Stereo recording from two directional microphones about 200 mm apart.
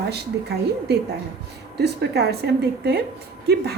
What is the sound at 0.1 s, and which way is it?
A woman's voice, 55° right (ahead or behind).